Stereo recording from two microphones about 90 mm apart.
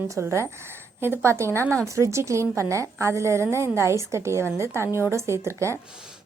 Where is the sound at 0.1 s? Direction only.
30° right (ahead or behind).